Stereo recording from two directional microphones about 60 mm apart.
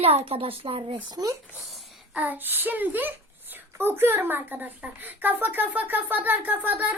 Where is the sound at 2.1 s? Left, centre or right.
Right.